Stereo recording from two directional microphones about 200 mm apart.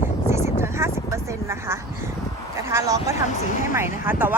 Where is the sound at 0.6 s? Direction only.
15° right (ahead or behind).